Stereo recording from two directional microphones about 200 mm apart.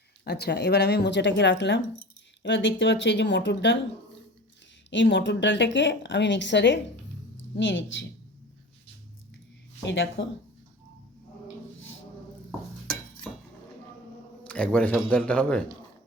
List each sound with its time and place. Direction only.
0.3 s speech: 55° left (ahead or behind)
4.9 s speech: 65° left (ahead or behind)
9.8 s speech: 65° left (ahead or behind)
14.4 s a man's voice: 5° left (ahead or behind)